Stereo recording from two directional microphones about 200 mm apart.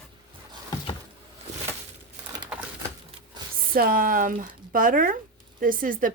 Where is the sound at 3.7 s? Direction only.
45° right (ahead or behind).